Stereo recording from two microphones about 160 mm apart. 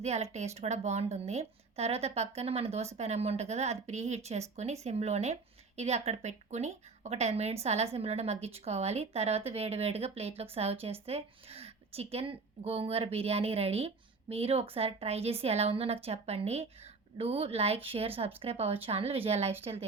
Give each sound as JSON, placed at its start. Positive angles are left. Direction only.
{"t": 0.0, "sound": "a woman's voice", "side_deg": -45}